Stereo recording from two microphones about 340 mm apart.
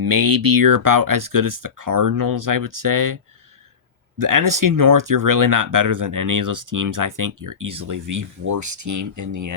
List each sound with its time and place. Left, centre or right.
0.0 s speech: right
4.2 s speech: right